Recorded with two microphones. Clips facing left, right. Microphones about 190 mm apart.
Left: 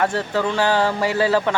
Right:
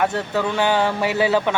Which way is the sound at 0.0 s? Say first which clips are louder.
Even; centre (ahead or behind).